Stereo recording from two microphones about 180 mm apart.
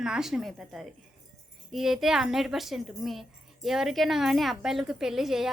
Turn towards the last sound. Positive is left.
turn(degrees=0)  # may be behind; listen again after turning